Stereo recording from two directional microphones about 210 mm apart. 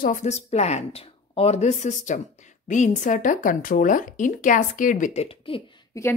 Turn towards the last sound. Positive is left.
turn(degrees=15)  # may be behind; listen again after turning